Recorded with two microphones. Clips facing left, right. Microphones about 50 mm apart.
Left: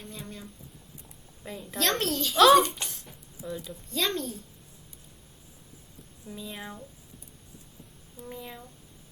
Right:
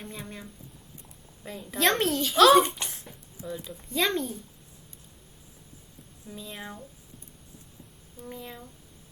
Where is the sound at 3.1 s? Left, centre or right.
Centre.